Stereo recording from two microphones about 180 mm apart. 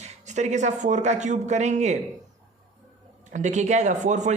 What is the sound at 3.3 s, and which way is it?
Speech, 40° right (ahead or behind).